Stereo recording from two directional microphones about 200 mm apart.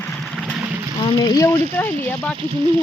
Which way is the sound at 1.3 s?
15° left (ahead or behind).